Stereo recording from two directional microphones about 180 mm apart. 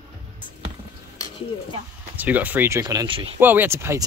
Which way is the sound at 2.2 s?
10° right (ahead or behind).